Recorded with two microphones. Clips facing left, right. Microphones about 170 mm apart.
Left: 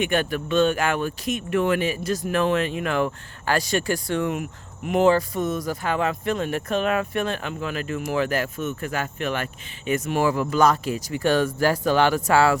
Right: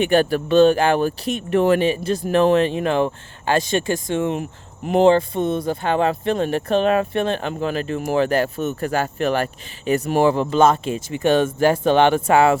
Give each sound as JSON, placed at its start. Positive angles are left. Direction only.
{"t": 0.0, "sound": "speech", "side_deg": -35}